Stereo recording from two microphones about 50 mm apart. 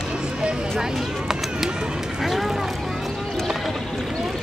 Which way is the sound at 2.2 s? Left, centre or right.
Centre.